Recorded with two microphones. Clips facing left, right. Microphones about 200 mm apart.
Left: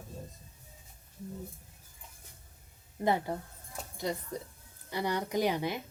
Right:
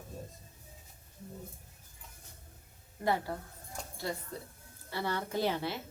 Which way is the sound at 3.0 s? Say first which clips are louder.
Left 3 dB; 20° left (ahead or behind).